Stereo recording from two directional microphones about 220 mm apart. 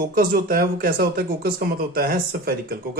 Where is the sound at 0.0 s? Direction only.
40° right (ahead or behind).